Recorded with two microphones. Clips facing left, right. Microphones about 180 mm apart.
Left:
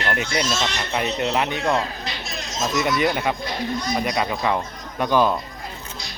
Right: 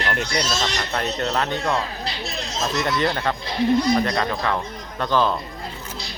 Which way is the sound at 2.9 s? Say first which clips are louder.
Left 1 dB; 15° left (ahead or behind).